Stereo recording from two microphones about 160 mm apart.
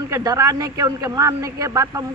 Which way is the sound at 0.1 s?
20° right (ahead or behind).